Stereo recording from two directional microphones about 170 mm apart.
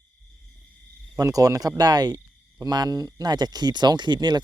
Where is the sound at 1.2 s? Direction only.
20° right (ahead or behind).